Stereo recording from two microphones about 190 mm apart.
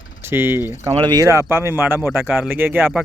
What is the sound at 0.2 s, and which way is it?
Speech, 10° right (ahead or behind).